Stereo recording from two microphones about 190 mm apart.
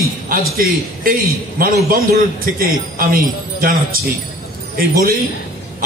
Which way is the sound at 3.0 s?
50° right (ahead or behind).